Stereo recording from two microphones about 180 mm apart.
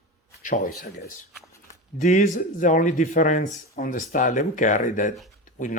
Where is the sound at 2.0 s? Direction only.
45° left (ahead or behind).